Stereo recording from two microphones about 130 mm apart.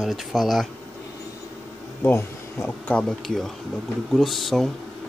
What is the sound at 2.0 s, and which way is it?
Speech, 20° left (ahead or behind).